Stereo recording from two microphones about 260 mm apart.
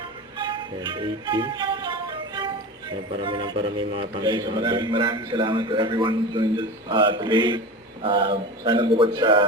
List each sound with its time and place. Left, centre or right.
0.3 s music: centre
3.2 s a man's voice: centre